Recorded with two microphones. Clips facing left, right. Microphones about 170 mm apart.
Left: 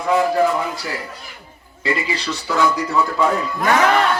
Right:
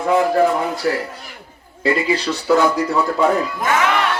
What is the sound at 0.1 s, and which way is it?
A man's voice, 55° right (ahead or behind).